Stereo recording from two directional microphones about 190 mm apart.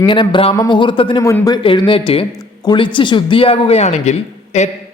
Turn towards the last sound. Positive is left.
turn(degrees=35)  # may be behind; listen again after turning